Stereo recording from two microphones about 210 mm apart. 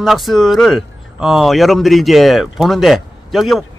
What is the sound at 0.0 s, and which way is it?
Speech, centre (ahead or behind).